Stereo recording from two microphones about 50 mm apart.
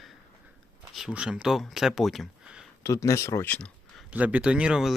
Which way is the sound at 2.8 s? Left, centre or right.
Left.